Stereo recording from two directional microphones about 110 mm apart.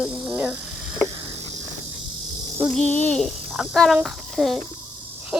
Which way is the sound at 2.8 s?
15° left (ahead or behind).